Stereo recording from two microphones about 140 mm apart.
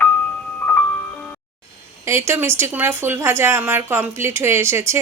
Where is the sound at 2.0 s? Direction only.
20° right (ahead or behind).